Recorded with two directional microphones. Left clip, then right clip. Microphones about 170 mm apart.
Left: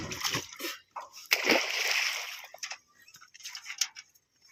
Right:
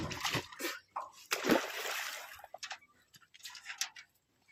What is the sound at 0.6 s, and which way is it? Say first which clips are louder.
Dog: left 1 dB; centre (ahead or behind).